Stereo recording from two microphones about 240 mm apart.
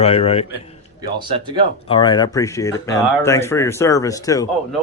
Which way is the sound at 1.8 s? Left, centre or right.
Left.